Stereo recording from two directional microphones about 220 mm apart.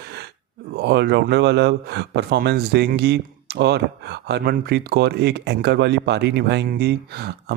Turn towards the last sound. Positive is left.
turn(degrees=-45)  # may be behind; listen again after turning